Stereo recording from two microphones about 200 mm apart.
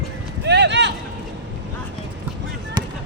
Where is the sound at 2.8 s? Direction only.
20° right (ahead or behind).